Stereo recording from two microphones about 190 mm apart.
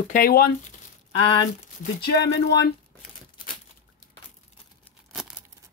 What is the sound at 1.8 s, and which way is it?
Speech, 60° left (ahead or behind).